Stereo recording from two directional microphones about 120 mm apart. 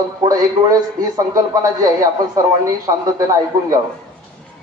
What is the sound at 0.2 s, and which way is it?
A man's voice, 30° right (ahead or behind).